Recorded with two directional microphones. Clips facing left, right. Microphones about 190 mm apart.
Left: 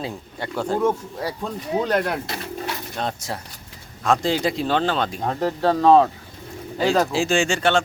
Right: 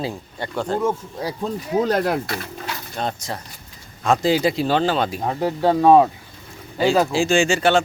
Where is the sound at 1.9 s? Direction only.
35° right (ahead or behind).